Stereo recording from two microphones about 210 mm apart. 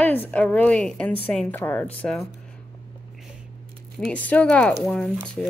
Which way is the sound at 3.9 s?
5° left (ahead or behind).